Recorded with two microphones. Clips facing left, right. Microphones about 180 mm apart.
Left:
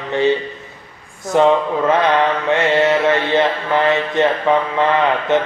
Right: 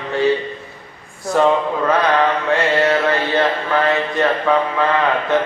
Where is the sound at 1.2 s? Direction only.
20° left (ahead or behind).